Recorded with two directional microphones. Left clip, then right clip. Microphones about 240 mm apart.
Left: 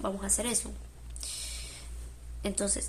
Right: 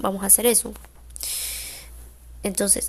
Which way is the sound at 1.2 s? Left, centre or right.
Right.